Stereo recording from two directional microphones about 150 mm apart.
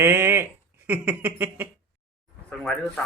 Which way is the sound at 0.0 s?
15° right (ahead or behind).